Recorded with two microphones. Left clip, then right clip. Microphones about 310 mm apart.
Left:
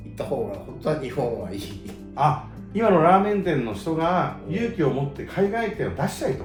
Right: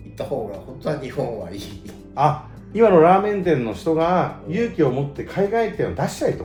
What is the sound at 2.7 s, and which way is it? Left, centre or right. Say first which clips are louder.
A man's voice: right 4 dB; right.